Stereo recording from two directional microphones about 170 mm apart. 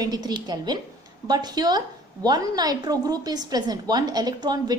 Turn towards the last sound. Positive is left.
turn(degrees=-25)  # may be behind; listen again after turning